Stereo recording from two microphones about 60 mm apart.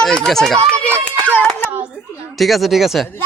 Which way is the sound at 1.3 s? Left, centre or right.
Left.